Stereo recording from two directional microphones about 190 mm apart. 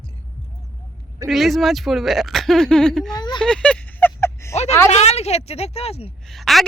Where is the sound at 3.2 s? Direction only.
25° left (ahead or behind).